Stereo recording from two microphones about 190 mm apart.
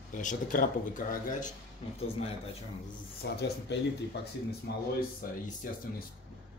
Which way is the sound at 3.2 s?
65° left (ahead or behind).